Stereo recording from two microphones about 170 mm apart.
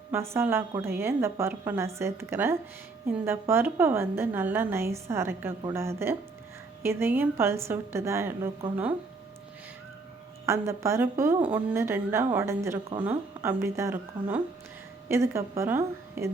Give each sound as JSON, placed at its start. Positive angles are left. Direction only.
{"t": 0.1, "sound": "a woman's voice", "side_deg": -15}
{"t": 10.4, "sound": "a woman's voice", "side_deg": -15}